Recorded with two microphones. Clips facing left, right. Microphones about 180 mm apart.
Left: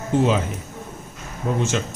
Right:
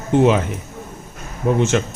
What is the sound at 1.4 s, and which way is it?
Speech, 65° right (ahead or behind).